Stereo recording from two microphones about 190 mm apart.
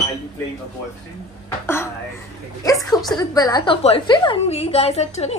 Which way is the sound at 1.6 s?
15° left (ahead or behind).